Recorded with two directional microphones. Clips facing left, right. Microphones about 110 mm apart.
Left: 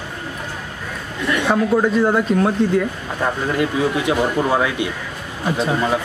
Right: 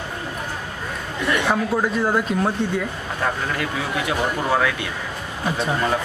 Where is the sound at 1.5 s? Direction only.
Centre (ahead or behind).